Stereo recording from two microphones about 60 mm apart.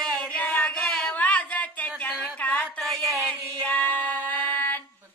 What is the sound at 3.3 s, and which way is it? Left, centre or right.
Music, left.